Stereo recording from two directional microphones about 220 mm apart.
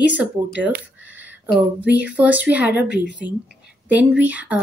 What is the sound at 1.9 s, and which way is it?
A woman's voice, 5° right (ahead or behind).